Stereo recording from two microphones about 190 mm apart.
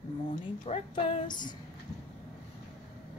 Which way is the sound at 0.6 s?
30° left (ahead or behind).